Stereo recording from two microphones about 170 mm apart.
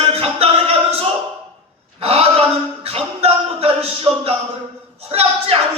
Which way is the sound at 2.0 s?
35° right (ahead or behind).